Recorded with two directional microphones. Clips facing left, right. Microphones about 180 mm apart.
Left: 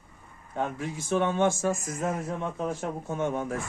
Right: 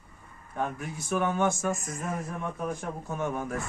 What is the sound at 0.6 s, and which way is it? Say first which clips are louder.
Speech: left 2 dB; 25° left (ahead or behind).